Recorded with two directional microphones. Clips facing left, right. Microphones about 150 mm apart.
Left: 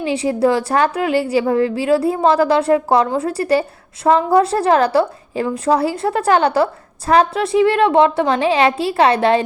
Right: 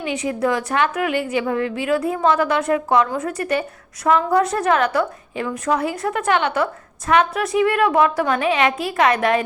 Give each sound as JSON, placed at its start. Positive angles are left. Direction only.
{"t": 0.0, "sound": "a woman's voice", "side_deg": 30}